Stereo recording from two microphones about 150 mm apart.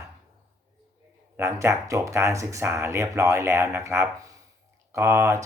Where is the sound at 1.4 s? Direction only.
20° right (ahead or behind).